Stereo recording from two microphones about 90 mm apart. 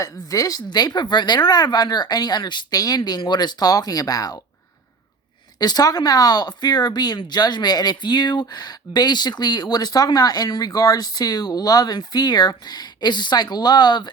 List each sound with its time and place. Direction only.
0.0 s speech: 40° left (ahead or behind)
5.5 s speech: 45° left (ahead or behind)